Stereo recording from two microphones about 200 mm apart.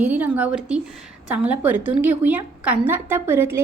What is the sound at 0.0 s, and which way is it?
A woman's voice, 5° right (ahead or behind).